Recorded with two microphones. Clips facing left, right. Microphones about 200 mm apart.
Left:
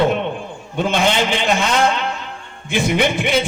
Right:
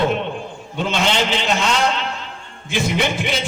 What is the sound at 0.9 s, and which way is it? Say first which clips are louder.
A man's voice: left 2 dB; 55° left (ahead or behind).